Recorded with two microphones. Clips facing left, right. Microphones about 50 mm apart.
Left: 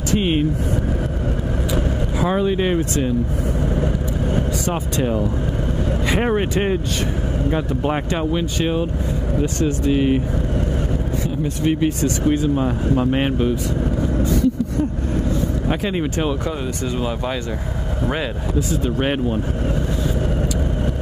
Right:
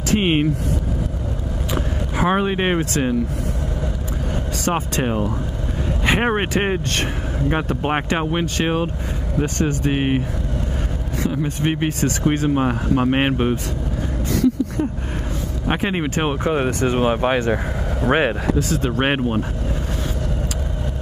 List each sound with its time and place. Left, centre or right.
0.1 s speech: right
2.1 s speech: right
4.6 s speech: right
6.0 s speech: right
9.4 s speech: right
11.4 s speech: right
15.7 s speech: right
18.5 s speech: right
18.9 s speech: right